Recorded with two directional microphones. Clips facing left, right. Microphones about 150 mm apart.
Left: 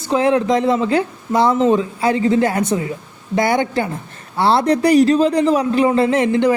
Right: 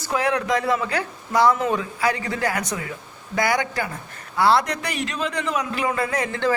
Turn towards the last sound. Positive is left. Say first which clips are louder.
# left 9 dB
turn(degrees=20)  # may be behind; listen again after turning